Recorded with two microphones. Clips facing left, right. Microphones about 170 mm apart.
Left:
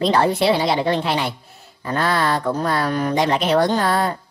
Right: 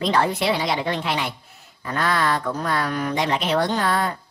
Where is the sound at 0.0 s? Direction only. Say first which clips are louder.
Left 4 dB; 35° left (ahead or behind).